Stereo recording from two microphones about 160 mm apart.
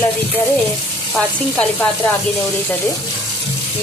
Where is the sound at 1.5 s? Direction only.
10° left (ahead or behind).